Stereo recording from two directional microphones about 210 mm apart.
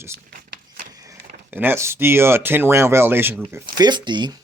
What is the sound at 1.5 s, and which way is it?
Speech, 10° right (ahead or behind).